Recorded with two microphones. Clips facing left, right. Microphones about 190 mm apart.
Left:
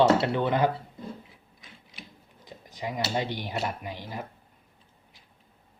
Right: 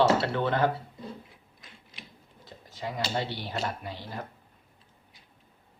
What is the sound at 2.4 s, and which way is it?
Speech, 15° left (ahead or behind).